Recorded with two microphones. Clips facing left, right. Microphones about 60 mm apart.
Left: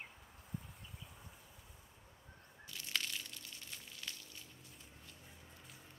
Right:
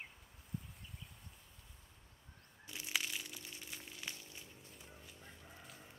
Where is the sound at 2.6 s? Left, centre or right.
Centre.